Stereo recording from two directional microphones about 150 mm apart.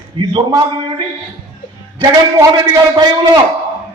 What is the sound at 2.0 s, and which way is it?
A man's voice, 25° right (ahead or behind).